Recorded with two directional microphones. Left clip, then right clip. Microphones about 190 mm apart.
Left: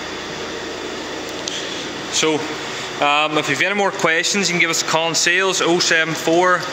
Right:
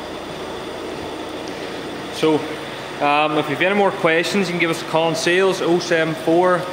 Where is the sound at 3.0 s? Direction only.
Centre (ahead or behind).